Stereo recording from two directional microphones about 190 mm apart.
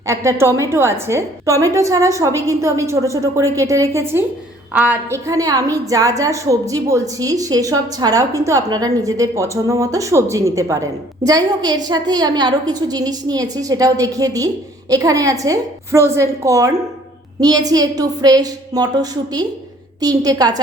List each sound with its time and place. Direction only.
0.1 s a woman's voice: 15° right (ahead or behind)